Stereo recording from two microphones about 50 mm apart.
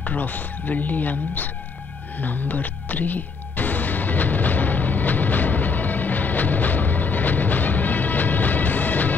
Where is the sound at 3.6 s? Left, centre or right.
Left.